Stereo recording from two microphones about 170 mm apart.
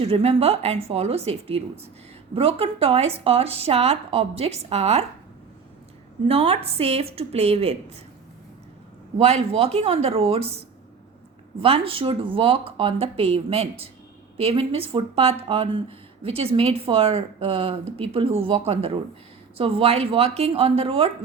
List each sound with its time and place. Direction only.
0.0 s speech: 35° right (ahead or behind)
6.2 s speech: 35° right (ahead or behind)
9.1 s speech: 40° right (ahead or behind)
11.6 s speech: 35° right (ahead or behind)